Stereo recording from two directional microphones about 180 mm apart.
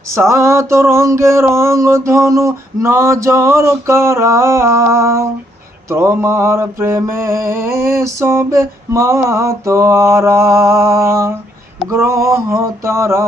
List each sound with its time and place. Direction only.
0.1 s mantra: 15° right (ahead or behind)